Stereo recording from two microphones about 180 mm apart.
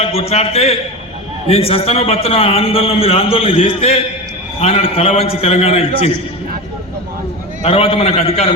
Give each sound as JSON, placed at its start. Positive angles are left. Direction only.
{"t": 0.0, "sound": "a man's voice", "side_deg": 35}
{"t": 7.6, "sound": "a man's voice", "side_deg": 30}